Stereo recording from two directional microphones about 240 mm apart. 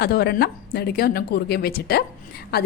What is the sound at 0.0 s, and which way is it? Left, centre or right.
A woman's voice, left.